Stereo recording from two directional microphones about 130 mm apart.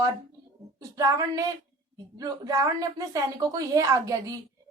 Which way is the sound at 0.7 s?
30° right (ahead or behind).